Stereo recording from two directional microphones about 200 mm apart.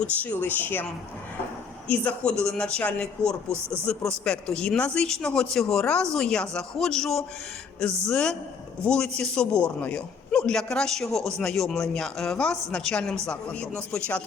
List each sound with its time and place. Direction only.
0.0 s speech: 5° left (ahead or behind)
1.9 s a man's voice: 5° left (ahead or behind)